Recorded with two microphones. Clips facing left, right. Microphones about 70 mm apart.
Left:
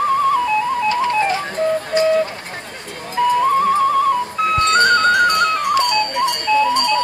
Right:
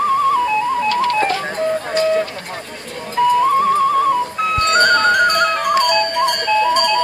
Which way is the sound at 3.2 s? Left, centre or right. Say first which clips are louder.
Right 1 dB; centre.